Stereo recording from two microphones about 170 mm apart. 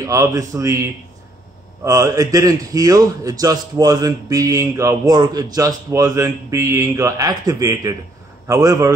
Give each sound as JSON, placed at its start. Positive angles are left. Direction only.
{"t": 0.0, "sound": "a man's voice", "side_deg": -20}
{"t": 1.9, "sound": "a man's voice", "side_deg": -20}